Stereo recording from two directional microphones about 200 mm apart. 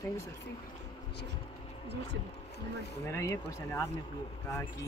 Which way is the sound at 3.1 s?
15° left (ahead or behind).